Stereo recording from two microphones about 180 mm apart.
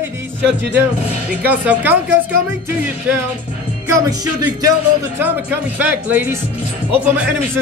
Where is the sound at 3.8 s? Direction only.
20° right (ahead or behind).